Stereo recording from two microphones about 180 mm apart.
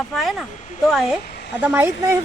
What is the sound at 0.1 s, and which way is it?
Speech, centre (ahead or behind).